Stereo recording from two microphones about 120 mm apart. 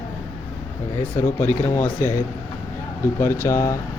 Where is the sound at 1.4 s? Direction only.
15° left (ahead or behind).